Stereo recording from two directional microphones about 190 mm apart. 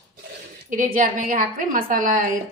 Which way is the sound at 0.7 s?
45° right (ahead or behind).